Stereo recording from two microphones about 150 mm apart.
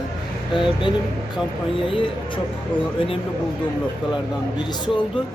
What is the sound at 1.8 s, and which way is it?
A man's voice, 35° left (ahead or behind).